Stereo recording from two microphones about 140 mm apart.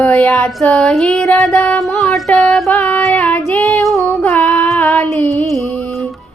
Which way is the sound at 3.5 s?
10° left (ahead or behind).